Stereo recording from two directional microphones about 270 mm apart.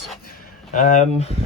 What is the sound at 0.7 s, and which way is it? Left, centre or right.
Speech, left.